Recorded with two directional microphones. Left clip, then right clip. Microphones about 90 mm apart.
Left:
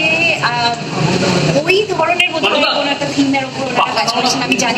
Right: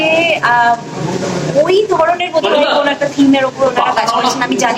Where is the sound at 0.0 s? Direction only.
25° right (ahead or behind).